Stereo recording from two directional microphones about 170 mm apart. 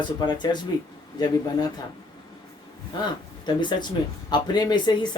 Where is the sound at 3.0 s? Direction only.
25° left (ahead or behind).